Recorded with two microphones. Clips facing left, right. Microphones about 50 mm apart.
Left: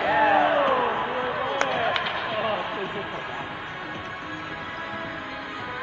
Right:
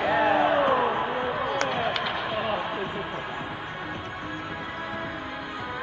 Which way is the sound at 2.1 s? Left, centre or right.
Left.